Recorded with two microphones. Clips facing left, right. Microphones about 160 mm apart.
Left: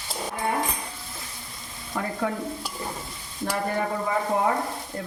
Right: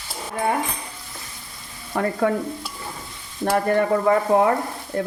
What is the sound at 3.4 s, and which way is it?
Stir, 70° right (ahead or behind).